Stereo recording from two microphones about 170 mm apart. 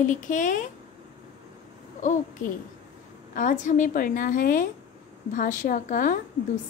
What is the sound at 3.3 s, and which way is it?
A woman's voice, 45° left (ahead or behind).